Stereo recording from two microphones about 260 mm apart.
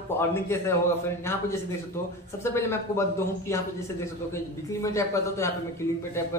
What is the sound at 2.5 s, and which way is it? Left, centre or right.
Speech, centre.